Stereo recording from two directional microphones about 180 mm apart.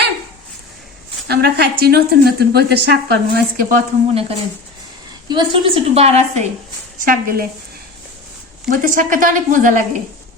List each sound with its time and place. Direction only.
1.3 s a woman's voice: 65° right (ahead or behind)
4.1 s a woman's voice: 35° right (ahead or behind)
7.0 s speech: 50° right (ahead or behind)
8.7 s speech: 50° right (ahead or behind)